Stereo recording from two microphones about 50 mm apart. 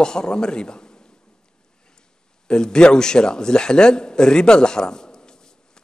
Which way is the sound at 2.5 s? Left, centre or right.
Centre.